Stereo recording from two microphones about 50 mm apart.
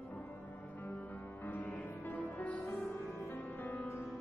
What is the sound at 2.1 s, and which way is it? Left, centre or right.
Music, left.